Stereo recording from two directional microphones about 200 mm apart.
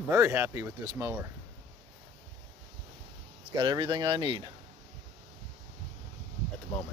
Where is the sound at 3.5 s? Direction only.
20° right (ahead or behind).